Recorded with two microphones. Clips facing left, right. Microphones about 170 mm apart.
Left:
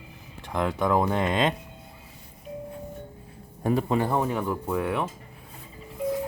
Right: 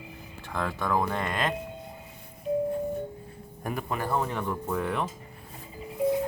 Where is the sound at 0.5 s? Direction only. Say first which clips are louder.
Left 4 dB; 20° left (ahead or behind).